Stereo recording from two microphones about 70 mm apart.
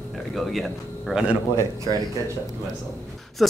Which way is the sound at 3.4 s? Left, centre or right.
Centre.